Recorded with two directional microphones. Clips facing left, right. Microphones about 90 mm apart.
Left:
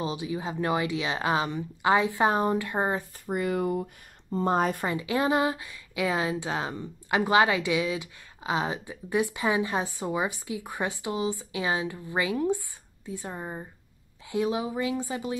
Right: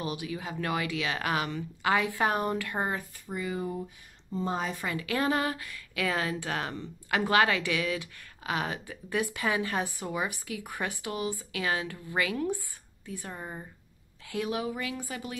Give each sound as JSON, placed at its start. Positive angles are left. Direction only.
{"t": 0.0, "sound": "speech", "side_deg": 20}
{"t": 3.3, "sound": "speech", "side_deg": 60}
{"t": 4.3, "sound": "speech", "side_deg": 55}
{"t": 4.8, "sound": "speech", "side_deg": 20}